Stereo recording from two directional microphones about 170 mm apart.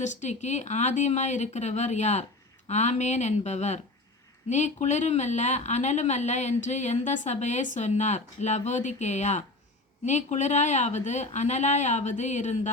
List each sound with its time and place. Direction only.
0.0 s speech: 45° left (ahead or behind)